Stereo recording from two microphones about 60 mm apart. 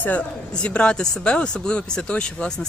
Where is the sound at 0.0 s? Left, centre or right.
Left.